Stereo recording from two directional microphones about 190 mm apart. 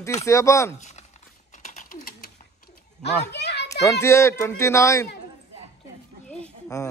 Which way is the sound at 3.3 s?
60° left (ahead or behind).